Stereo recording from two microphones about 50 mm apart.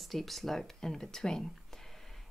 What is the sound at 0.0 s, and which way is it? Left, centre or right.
Speech, centre.